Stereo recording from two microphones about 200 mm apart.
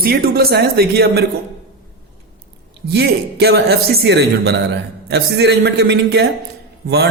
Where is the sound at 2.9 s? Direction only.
55° right (ahead or behind).